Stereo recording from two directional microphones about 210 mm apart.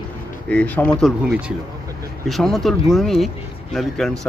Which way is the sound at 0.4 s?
5° left (ahead or behind).